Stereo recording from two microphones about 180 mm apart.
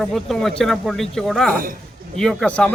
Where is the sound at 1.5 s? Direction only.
50° right (ahead or behind).